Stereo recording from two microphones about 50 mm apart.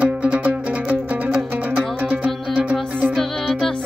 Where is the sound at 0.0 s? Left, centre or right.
Right.